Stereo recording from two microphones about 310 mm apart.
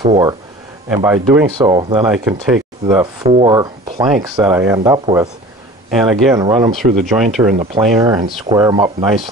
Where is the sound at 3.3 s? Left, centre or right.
Centre.